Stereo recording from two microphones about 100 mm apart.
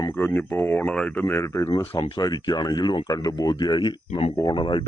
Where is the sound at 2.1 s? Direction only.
45° left (ahead or behind).